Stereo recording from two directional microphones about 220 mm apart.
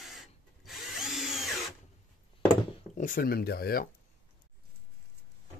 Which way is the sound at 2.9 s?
35° left (ahead or behind).